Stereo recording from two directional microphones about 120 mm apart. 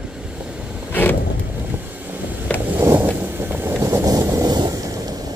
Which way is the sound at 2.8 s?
20° right (ahead or behind).